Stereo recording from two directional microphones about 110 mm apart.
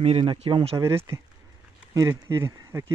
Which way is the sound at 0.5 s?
50° right (ahead or behind).